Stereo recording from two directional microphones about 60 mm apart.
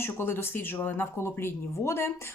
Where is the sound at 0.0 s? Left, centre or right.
Left.